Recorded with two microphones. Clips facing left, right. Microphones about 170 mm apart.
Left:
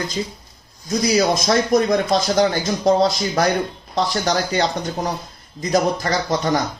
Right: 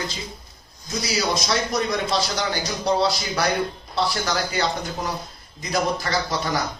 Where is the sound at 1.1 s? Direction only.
50° left (ahead or behind).